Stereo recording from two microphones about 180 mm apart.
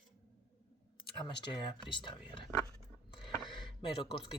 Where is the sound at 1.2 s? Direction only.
25° left (ahead or behind).